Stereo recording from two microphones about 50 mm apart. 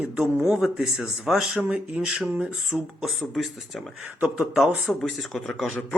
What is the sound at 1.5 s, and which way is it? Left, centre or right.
Speech, right.